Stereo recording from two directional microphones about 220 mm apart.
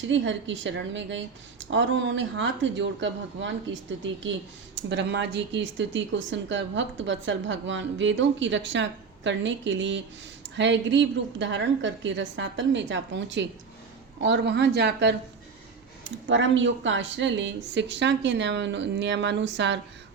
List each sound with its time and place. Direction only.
0.0 s a woman's voice: 55° right (ahead or behind)